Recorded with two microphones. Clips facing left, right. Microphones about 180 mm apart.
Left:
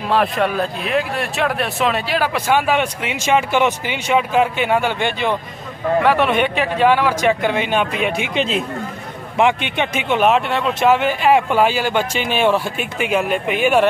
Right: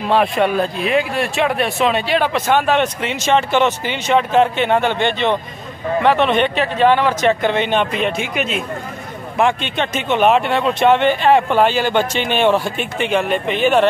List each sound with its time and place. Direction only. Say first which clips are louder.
0.1 s speech: right 2 dB; centre (ahead or behind)
8.4 s speech: left 2 dB; 30° left (ahead or behind)
9.4 s speech: even; 15° left (ahead or behind)